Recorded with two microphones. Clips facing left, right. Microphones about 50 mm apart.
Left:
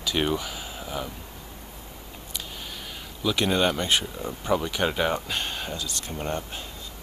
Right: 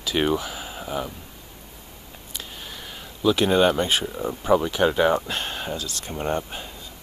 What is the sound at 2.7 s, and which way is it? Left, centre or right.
Speech, centre.